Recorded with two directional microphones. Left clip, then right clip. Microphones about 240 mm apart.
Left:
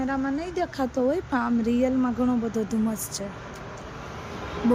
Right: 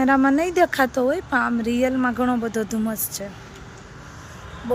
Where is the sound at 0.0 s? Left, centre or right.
Right.